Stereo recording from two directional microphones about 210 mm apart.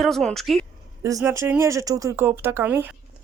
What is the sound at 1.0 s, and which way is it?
Speech, 10° right (ahead or behind).